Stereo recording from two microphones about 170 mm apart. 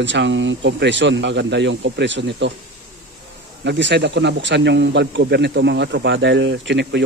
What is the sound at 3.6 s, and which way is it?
Speech, 85° right.